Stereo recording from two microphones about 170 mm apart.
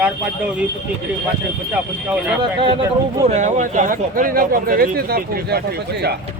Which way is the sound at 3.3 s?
45° right (ahead or behind).